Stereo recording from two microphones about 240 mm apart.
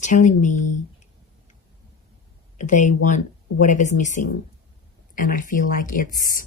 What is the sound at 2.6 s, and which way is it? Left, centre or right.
Speech, left.